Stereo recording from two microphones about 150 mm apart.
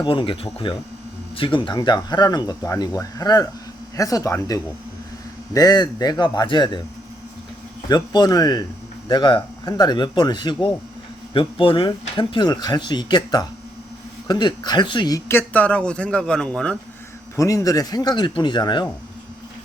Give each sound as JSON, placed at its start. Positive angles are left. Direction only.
{"t": 0.0, "sound": "speech", "side_deg": 35}
{"t": 7.9, "sound": "speech", "side_deg": 25}
{"t": 15.3, "sound": "a man's voice", "side_deg": 15}
{"t": 17.3, "sound": "speech", "side_deg": 20}